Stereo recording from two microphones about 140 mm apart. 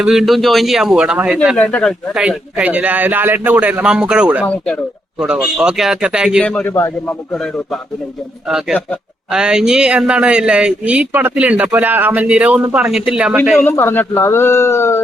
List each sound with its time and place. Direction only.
0.0 s speech: centre (ahead or behind)
1.5 s speech: 10° left (ahead or behind)
2.1 s speech: 5° right (ahead or behind)
4.4 s speech: 10° left (ahead or behind)
5.2 s speech: 5° right (ahead or behind)
6.4 s speech: 10° left (ahead or behind)
7.3 s speech: 5° left (ahead or behind)
13.6 s speech: 15° left (ahead or behind)